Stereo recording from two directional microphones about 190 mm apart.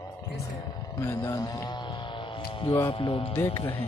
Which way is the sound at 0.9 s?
20° left (ahead or behind).